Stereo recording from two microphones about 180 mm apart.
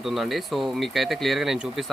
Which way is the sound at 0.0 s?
Centre (ahead or behind).